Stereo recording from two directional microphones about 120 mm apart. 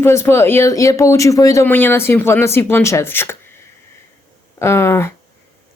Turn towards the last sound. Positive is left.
turn(degrees=20)  # may be behind; listen again after turning